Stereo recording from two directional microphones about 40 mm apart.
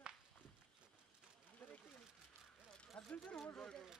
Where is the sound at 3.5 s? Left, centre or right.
Centre.